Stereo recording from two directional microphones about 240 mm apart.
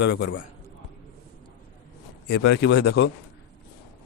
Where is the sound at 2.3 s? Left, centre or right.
Left.